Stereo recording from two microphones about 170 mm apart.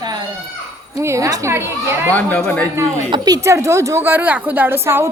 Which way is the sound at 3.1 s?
20° right (ahead or behind).